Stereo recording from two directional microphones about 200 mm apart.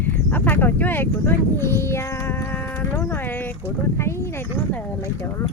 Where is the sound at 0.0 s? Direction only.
10° left (ahead or behind).